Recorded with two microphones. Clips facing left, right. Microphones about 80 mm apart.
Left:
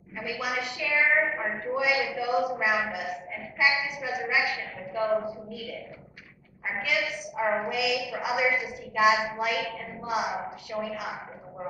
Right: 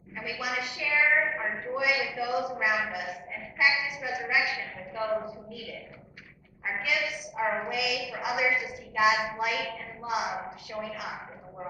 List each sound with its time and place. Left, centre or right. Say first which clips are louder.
0.2 s a woman's voice: left 2 dB; centre
6.8 s a woman's voice: left 2 dB; centre